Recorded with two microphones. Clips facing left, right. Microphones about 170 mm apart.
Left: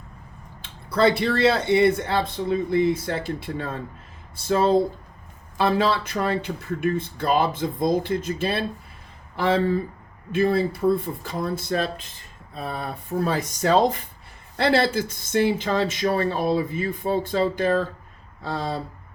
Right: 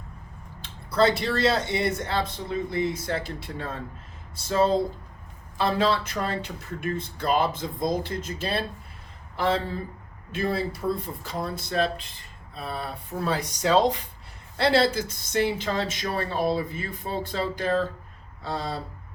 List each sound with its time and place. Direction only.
0.6 s speech: 55° left (ahead or behind)